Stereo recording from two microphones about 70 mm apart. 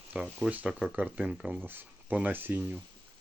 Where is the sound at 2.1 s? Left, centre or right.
Right.